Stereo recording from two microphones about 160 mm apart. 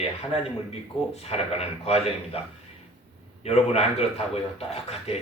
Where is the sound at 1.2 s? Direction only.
40° left (ahead or behind).